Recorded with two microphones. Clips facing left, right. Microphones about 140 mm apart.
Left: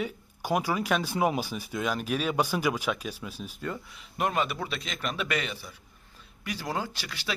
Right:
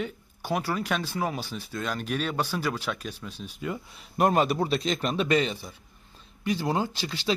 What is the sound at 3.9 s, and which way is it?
A man's voice, 40° right (ahead or behind).